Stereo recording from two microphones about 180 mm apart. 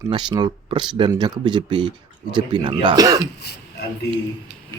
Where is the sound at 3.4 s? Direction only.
65° left (ahead or behind).